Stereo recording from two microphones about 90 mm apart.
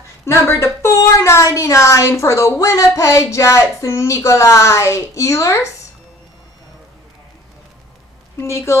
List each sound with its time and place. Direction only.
0.2 s speech: 30° left (ahead or behind)
8.4 s speech: 30° left (ahead or behind)